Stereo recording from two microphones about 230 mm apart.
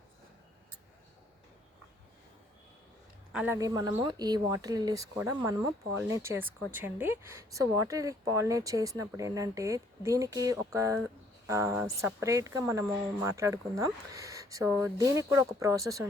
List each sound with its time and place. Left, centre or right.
3.3 s speech: centre